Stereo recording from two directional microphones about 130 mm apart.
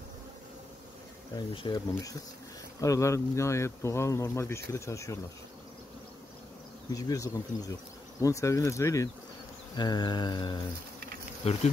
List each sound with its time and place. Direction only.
1.3 s mantra: 40° left (ahead or behind)
2.8 s speech: 25° left (ahead or behind)
6.9 s speech: 30° left (ahead or behind)
9.8 s mantra: 35° left (ahead or behind)
11.4 s bee: 50° left (ahead or behind)